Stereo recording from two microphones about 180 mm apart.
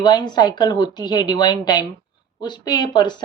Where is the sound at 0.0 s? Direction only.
20° left (ahead or behind).